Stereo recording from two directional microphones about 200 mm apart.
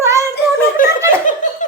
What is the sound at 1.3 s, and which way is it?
Laughter, 40° left (ahead or behind).